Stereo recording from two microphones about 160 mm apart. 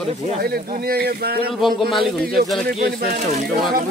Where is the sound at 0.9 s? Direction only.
80° right.